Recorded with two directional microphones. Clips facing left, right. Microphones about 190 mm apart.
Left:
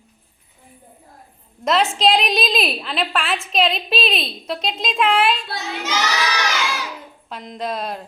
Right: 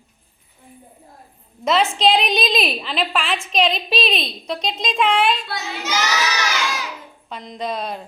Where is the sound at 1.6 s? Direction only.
Centre (ahead or behind).